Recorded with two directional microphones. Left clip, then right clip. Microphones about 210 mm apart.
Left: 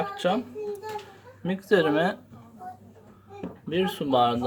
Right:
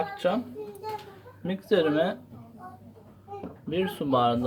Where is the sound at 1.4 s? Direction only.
15° left (ahead or behind).